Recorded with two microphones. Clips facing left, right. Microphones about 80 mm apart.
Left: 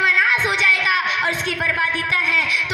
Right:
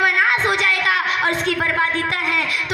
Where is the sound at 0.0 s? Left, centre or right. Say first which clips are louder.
Right 1 dB; right.